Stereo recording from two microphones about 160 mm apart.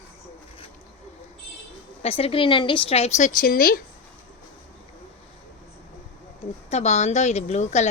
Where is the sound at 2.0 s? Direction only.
40° left (ahead or behind); by 3.8 s 65° left (ahead or behind).